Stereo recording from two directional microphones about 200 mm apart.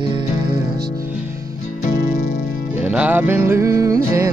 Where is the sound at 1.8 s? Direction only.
40° left (ahead or behind).